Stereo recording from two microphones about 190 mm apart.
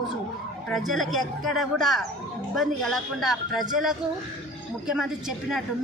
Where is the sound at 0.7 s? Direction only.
Centre (ahead or behind).